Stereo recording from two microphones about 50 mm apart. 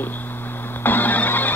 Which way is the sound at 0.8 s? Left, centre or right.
Left.